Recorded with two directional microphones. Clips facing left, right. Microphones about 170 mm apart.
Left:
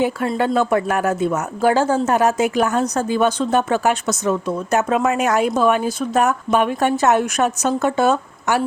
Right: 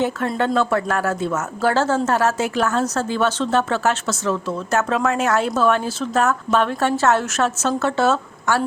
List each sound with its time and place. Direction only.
0.3 s speech: 10° left (ahead or behind)